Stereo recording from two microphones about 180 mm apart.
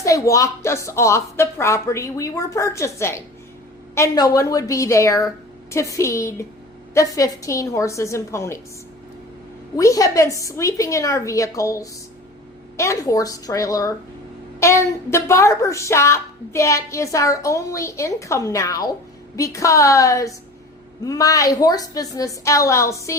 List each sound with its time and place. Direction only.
0.0 s a woman's voice: 20° left (ahead or behind)
9.7 s a woman's voice: 20° left (ahead or behind)